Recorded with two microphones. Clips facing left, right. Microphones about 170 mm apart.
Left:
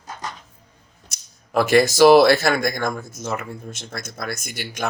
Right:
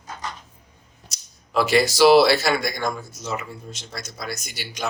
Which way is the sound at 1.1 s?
50° left (ahead or behind).